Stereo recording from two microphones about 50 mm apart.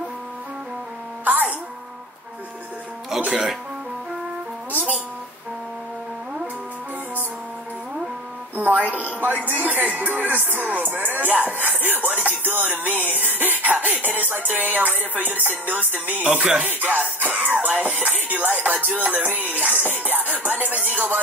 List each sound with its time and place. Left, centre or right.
1.2 s music: right
3.3 s speech: centre
8.5 s music: right
16.3 s music: centre
16.6 s music: right